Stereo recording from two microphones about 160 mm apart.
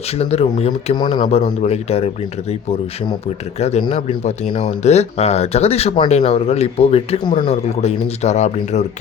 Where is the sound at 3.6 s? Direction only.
40° left (ahead or behind).